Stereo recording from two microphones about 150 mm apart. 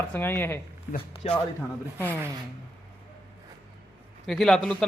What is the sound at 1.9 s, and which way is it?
Speech, 10° left (ahead or behind).